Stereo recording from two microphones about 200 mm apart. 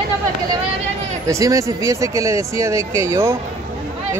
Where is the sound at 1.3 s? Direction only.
15° right (ahead or behind).